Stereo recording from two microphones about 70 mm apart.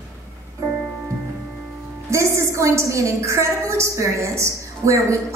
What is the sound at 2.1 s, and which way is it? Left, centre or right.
A woman's voice, right.